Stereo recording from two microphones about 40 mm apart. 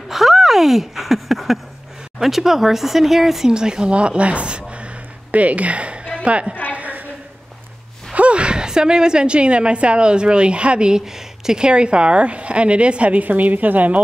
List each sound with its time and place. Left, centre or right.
0.1 s speech: centre
3.9 s a woman's voice: right
6.7 s a sound: right
8.1 s speech: right
10.9 s speech: centre; by 14.0 s right